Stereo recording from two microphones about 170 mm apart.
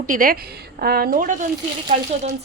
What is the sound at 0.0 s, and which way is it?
A woman's voice, 55° right (ahead or behind).